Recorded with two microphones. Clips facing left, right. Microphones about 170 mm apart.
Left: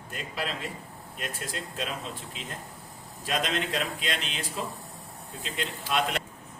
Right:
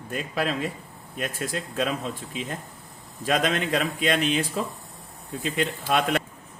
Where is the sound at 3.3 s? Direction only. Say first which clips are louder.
Right 6 dB; 55° right (ahead or behind).